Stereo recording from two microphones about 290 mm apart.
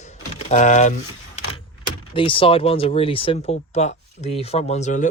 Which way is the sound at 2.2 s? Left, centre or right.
Centre.